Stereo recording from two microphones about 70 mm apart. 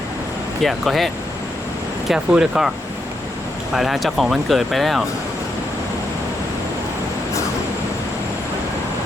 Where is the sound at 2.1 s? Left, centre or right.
Centre.